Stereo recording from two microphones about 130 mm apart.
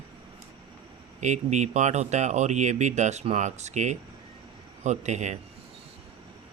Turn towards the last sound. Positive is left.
turn(degrees=-65)  # may be behind; listen again after turning